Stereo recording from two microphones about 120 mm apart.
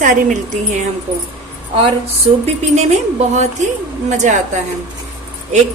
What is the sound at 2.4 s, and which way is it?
Speech, 65° right (ahead or behind).